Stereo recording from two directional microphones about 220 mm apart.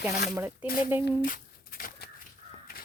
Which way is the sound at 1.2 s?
40° left (ahead or behind).